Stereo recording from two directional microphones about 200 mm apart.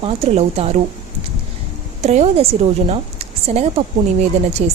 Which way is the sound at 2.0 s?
30° right (ahead or behind).